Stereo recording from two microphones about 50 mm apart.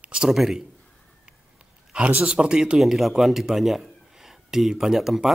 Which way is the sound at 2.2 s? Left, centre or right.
Centre.